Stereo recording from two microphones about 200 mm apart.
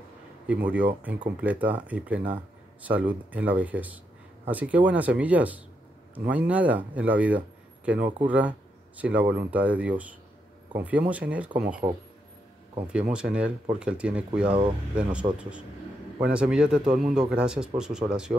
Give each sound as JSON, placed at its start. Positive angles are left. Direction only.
{"t": 0.5, "sound": "speech", "side_deg": -10}
{"t": 11.8, "sound": "a man's voice", "side_deg": -20}
{"t": 12.8, "sound": "a man's voice", "side_deg": -5}
{"t": 15.2, "sound": "a man's voice", "side_deg": -20}
{"t": 16.2, "sound": "a man's voice", "side_deg": -5}